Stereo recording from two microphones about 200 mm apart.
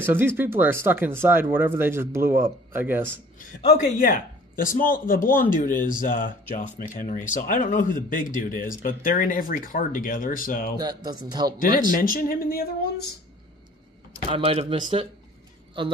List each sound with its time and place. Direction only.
0.1 s speech: 10° right (ahead or behind)
4.0 s speech: 45° left (ahead or behind)
10.8 s speech: 20° right (ahead or behind)
12.0 s speech: 45° left (ahead or behind)
14.1 s speech: 25° right (ahead or behind)